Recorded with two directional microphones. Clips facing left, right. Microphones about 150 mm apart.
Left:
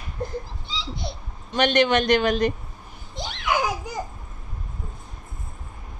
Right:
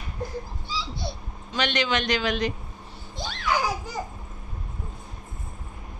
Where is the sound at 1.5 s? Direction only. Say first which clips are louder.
Left 6 dB; 55° left (ahead or behind).